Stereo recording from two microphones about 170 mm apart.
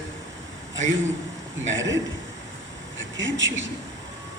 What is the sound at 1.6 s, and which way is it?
Speech, 90° right.